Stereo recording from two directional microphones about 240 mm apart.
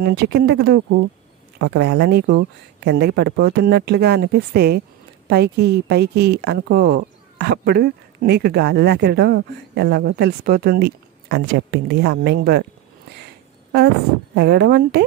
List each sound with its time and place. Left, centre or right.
0.0 s a woman's voice: right
14.3 s speech: right